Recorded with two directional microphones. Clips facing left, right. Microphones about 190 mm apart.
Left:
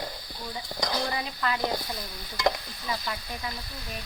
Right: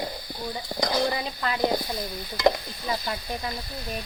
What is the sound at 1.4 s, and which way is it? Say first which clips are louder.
Speech: right 3 dB; 20° right (ahead or behind).